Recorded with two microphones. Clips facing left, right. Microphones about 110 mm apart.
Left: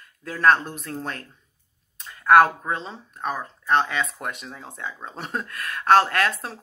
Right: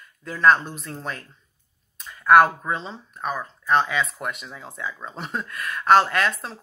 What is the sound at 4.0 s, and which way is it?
Speech, 35° left (ahead or behind).